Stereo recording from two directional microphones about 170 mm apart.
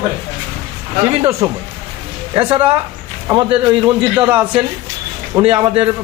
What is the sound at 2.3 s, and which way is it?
Speech, 30° right (ahead or behind).